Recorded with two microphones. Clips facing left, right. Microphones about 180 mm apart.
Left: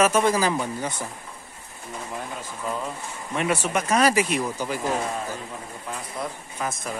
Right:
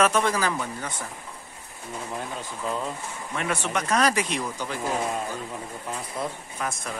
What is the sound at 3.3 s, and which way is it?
Speech, 20° left (ahead or behind).